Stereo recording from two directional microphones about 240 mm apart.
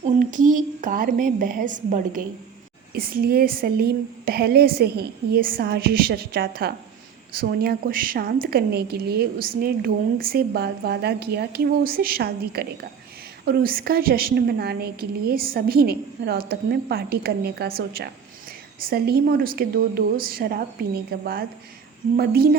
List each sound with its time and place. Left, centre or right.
0.0 s a woman's voice: right